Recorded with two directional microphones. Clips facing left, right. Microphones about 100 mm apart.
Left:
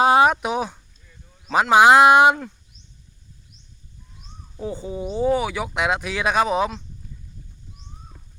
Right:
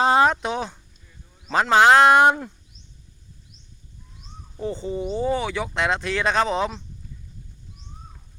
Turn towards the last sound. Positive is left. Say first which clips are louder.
# left 2 dB
turn(degrees=10)  # may be behind; listen again after turning